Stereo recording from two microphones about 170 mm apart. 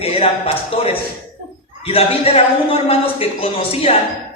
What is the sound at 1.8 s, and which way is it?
A man's voice, 35° left (ahead or behind).